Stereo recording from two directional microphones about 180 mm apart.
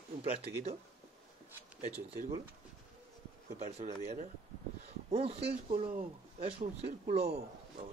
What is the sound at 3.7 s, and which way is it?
Speech, 40° right (ahead or behind).